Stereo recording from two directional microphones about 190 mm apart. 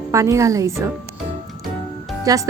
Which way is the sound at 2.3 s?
20° right (ahead or behind).